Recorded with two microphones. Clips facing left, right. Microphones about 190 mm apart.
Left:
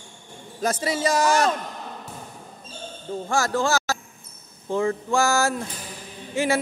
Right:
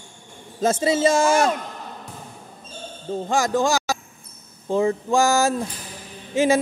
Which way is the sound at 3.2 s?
15° right (ahead or behind).